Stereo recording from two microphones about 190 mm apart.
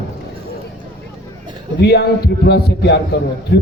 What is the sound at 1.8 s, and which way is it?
A man's voice, 60° left (ahead or behind).